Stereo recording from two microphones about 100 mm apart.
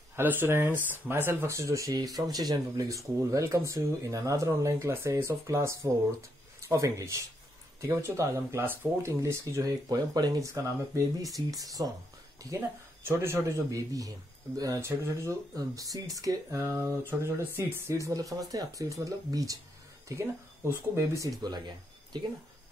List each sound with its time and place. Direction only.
0.1 s a man's voice: 20° right (ahead or behind); by 11.9 s 35° right (ahead or behind)
12.5 s a man's voice: 25° right (ahead or behind)
15.5 s speech: 35° right (ahead or behind)